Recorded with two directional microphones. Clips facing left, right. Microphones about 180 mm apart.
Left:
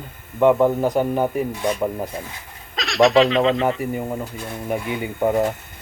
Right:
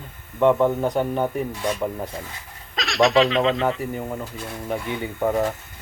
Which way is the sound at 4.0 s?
15° left (ahead or behind).